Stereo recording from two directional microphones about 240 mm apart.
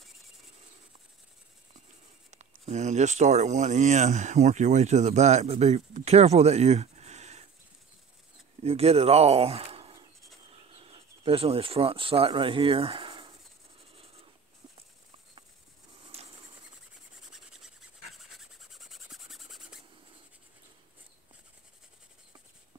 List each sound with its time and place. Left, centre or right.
2.3 s speech: right
8.6 s speech: right
13.9 s writing: right
16.1 s a sound: right
17.3 s rub: centre
18.7 s filing: centre